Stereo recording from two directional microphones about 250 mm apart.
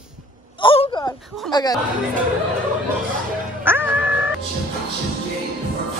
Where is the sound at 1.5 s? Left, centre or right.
Centre.